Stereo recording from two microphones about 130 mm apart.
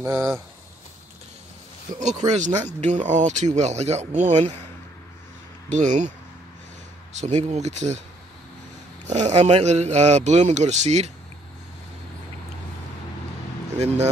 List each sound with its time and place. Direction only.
0.0 s speech: 25° right (ahead or behind)
2.0 s speech: 65° right (ahead or behind)
5.7 s speech: 65° right (ahead or behind)
7.2 s speech: 65° right (ahead or behind)
9.0 s speech: 60° right (ahead or behind)
13.7 s speech: 55° right (ahead or behind)